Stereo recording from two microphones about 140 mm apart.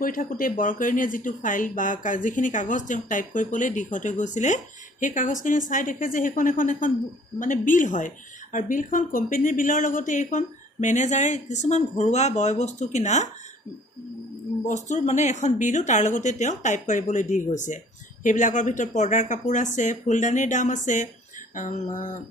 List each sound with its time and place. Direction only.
0.0 s speech: 80° left; by 13.3 s 55° left (ahead or behind)
14.7 s speech: 60° left (ahead or behind)